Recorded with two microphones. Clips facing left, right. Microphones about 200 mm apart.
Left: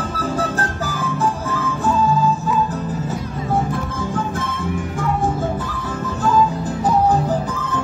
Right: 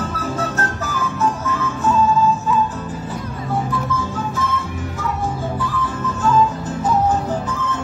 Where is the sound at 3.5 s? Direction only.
50° left (ahead or behind).